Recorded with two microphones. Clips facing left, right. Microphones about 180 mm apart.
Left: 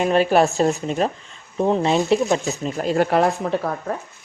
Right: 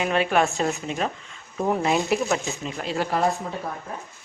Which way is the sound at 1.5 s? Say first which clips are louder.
Left 4 dB; 25° left (ahead or behind).